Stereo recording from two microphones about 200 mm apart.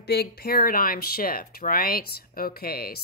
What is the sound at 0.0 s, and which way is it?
Speech, 55° left (ahead or behind).